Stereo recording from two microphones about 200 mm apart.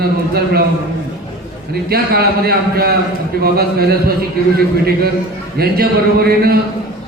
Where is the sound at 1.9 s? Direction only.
50° right (ahead or behind).